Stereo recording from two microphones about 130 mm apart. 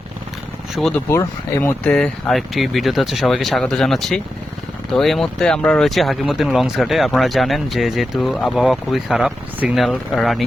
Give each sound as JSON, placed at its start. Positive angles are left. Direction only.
{"t": 0.8, "sound": "speech", "side_deg": 5}
{"t": 1.1, "sound": "speech", "side_deg": 20}
{"t": 1.8, "sound": "speech", "side_deg": 10}